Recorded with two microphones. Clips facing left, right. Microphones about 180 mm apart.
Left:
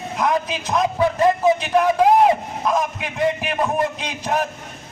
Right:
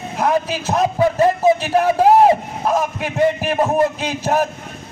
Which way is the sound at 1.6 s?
40° right (ahead or behind).